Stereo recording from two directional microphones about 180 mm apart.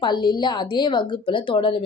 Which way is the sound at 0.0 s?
25° left (ahead or behind).